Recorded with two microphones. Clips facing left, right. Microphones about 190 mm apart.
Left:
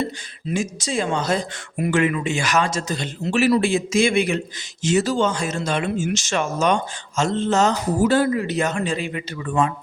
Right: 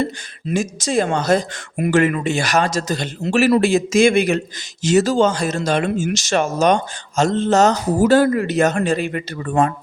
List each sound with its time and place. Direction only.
0.5 s speech: 45° right (ahead or behind)